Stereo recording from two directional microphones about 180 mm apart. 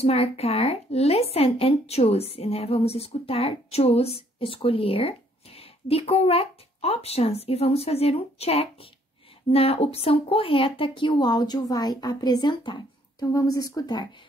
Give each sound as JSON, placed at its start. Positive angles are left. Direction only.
{"t": 0.0, "sound": "a woman's voice", "side_deg": 35}